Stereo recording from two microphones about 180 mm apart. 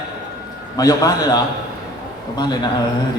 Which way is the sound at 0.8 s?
20° left (ahead or behind).